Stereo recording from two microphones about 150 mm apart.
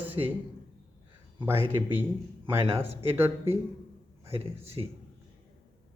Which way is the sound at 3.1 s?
15° right (ahead or behind).